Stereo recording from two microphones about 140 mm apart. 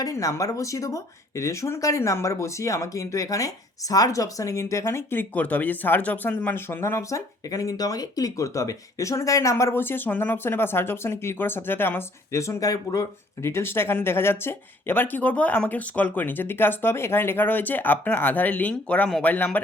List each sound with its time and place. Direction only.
0.0 s speech: 25° left (ahead or behind)